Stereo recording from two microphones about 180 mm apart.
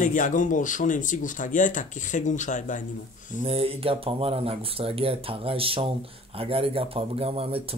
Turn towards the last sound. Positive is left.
turn(degrees=-30)  # may be behind; listen again after turning